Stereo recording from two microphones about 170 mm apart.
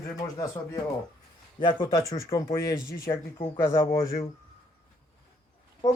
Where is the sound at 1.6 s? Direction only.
25° left (ahead or behind).